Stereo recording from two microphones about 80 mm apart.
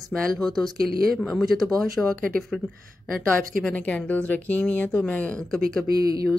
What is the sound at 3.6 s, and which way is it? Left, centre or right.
Speech, centre.